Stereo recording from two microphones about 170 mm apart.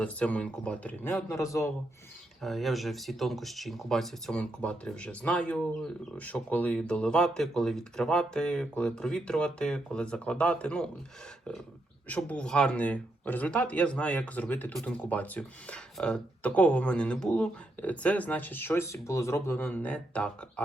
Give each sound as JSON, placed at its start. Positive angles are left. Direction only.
{"t": 0.0, "sound": "speech", "side_deg": 10}
{"t": 2.4, "sound": "speech", "side_deg": 0}
{"t": 12.0, "sound": "speech", "side_deg": 10}